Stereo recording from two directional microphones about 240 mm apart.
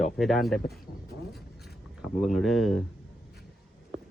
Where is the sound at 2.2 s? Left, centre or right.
Centre.